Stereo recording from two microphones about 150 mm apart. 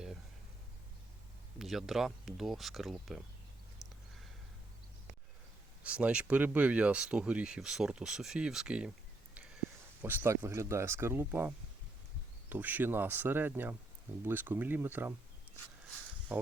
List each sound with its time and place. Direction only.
1.5 s speech: centre (ahead or behind)
5.8 s speech: 10° right (ahead or behind)
10.0 s speech: 15° right (ahead or behind)
16.3 s speech: 10° right (ahead or behind)